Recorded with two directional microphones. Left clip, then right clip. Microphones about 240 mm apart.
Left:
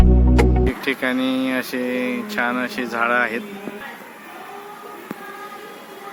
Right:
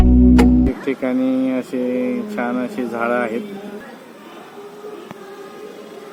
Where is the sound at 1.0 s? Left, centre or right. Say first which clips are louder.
Right 2 dB; centre.